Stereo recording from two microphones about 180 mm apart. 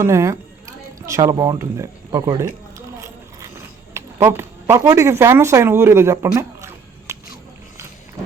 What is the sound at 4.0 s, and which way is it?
Speech, 15° right (ahead or behind).